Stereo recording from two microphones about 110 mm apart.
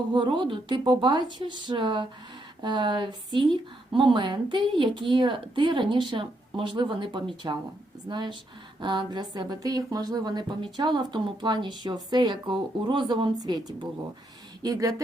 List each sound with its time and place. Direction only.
0.1 s speech: 45° right (ahead or behind)